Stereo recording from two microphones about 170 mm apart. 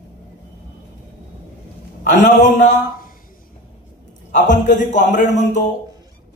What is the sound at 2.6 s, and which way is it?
Speech, 50° left (ahead or behind).